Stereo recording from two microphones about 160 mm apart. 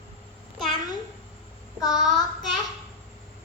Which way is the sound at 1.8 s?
25° left (ahead or behind).